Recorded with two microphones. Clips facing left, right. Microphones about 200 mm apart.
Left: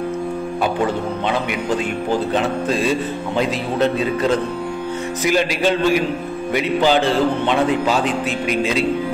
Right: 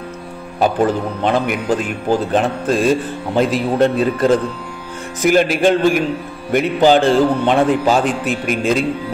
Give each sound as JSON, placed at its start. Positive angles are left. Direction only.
{"t": 0.6, "sound": "a man's voice", "side_deg": -50}